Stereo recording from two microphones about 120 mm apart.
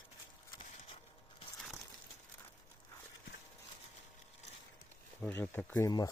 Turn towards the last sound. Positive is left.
turn(degrees=15)  # may be behind; listen again after turning